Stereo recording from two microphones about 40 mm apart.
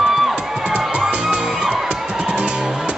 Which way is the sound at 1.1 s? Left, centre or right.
Right.